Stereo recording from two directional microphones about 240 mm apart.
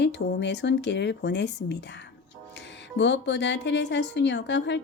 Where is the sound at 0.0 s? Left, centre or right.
Left.